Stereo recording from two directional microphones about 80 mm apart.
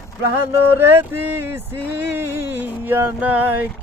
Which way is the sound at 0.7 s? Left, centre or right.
Right.